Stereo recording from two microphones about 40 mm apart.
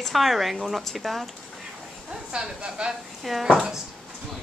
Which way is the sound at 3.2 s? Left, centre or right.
Centre.